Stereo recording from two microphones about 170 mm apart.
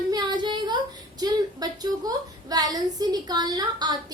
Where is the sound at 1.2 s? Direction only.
25° right (ahead or behind).